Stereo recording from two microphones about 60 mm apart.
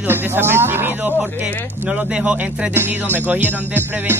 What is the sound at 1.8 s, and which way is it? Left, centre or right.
Speech, centre.